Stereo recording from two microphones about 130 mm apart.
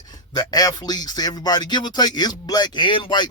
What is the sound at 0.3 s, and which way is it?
Speech, 30° left (ahead or behind).